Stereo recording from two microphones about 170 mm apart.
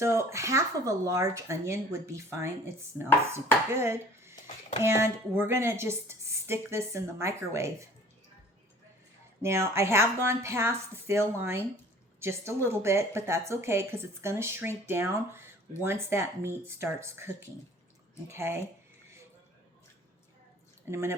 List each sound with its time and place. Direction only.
0.0 s speech: 15° right (ahead or behind)
9.4 s speech: 15° right (ahead or behind)
20.9 s speech: 15° right (ahead or behind)